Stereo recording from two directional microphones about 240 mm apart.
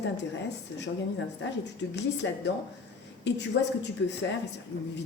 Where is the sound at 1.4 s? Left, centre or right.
Left.